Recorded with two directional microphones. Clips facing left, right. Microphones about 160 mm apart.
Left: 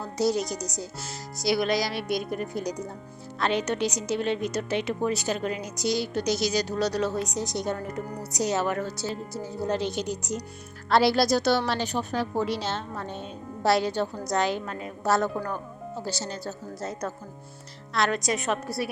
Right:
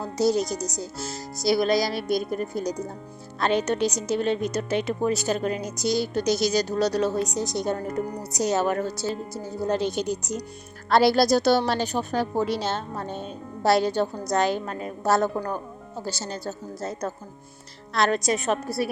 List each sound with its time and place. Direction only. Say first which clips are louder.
0.2 s a woman's voice: right 3 dB; 35° right (ahead or behind)
7.6 s speech: right 3 dB; 30° right (ahead or behind)
8.4 s a woman's voice: right 3 dB; 45° right (ahead or behind)
16.3 s a woman's voice: right 2 dB; 50° right (ahead or behind)
16.8 s a woman's voice: right 2 dB; 30° right (ahead or behind)